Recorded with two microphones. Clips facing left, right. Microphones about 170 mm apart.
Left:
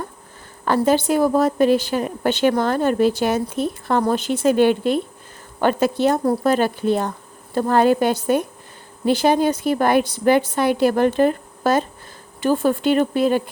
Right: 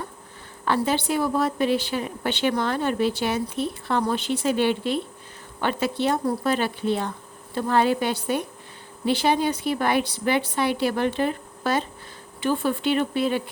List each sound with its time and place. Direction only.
0.6 s a woman's voice: 45° left (ahead or behind)